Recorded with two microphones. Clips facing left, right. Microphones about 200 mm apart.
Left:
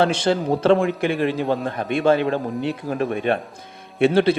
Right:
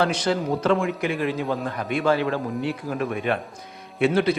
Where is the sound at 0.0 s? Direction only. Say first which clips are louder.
Left 3 dB; 25° left (ahead or behind).